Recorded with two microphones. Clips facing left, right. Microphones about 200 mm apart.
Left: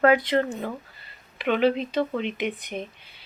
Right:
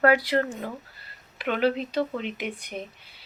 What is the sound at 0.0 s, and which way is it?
Speech, 5° right (ahead or behind).